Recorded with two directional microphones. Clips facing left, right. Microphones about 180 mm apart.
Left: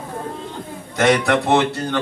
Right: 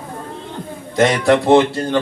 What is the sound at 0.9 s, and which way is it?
A man's voice, 30° right (ahead or behind).